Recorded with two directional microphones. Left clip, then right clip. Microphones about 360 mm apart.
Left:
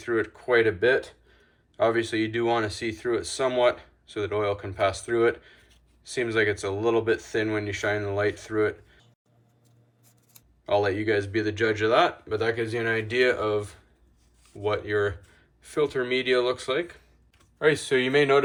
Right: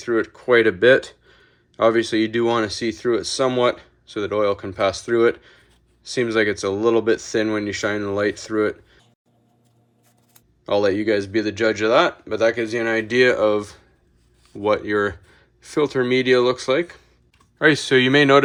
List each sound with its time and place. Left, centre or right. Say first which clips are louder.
0.0 s speech: right 5 dB; centre
10.7 s speech: right 5 dB; centre